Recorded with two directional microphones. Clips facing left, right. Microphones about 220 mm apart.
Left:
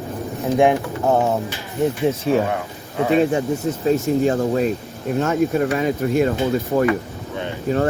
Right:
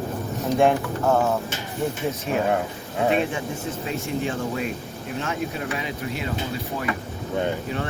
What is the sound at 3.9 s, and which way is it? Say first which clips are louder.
Speech: left 11 dB; 40° left (ahead or behind).